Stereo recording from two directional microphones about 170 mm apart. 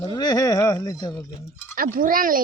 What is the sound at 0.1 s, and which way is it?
Speech, 25° left (ahead or behind).